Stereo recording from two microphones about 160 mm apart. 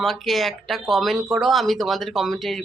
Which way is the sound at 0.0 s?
Centre (ahead or behind).